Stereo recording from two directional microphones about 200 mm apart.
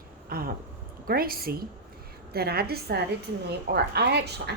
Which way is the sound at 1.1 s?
50° right (ahead or behind).